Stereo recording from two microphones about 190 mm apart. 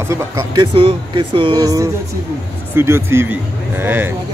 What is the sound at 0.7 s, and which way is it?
Speech, 30° right (ahead or behind).